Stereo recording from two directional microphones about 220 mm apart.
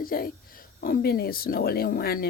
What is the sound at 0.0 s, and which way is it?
Speech, 40° left (ahead or behind).